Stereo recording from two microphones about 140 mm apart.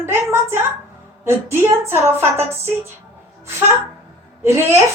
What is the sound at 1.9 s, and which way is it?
Speech, 15° right (ahead or behind).